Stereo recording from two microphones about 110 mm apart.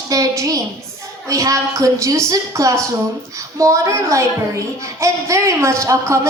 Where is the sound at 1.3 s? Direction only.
30° right (ahead or behind).